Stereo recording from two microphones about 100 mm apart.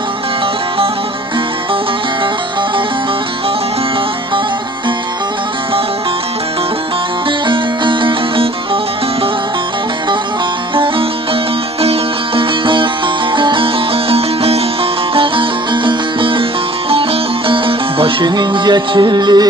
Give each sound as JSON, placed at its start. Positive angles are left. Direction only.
{"t": 7.2, "sound": "music", "side_deg": -55}
{"t": 10.7, "sound": "music", "side_deg": -60}
{"t": 15.1, "sound": "music", "side_deg": -55}